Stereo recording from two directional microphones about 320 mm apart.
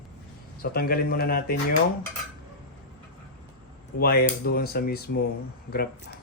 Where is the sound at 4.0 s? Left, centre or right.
Left.